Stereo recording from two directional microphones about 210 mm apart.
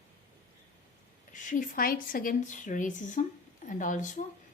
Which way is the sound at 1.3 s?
40° left (ahead or behind).